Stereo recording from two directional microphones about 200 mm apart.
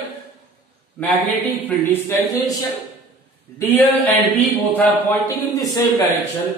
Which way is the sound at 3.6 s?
10° left (ahead or behind).